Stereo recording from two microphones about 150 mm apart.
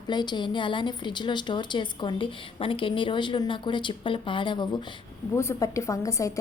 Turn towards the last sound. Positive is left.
turn(degrees=20)  # may be behind; listen again after turning